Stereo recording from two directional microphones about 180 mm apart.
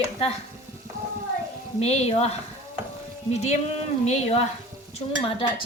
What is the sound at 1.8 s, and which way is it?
Speech, 35° left (ahead or behind).